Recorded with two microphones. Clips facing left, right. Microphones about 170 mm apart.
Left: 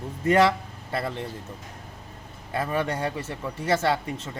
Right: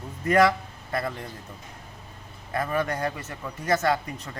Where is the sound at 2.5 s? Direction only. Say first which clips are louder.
Even; 30° left (ahead or behind).